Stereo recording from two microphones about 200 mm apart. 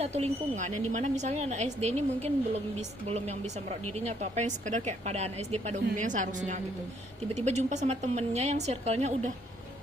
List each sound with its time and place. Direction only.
0.0 s speech: 35° right (ahead or behind)